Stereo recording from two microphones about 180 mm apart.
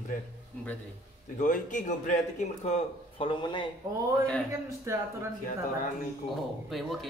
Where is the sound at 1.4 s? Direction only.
45° left (ahead or behind); by 3.7 s 25° left (ahead or behind).